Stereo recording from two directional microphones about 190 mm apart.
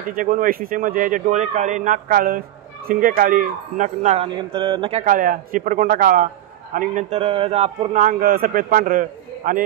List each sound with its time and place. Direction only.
0.1 s speech: 45° right (ahead or behind); by 5.0 s 30° right (ahead or behind)
5.0 s speech: 45° right (ahead or behind)
8.0 s speech: 50° right (ahead or behind)